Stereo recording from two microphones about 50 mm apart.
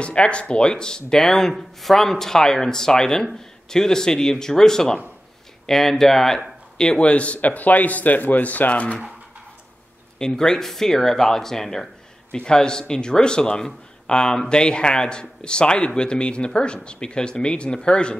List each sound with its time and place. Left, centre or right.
0.0 s speech: left
6.8 s speech: left
10.1 s speech: centre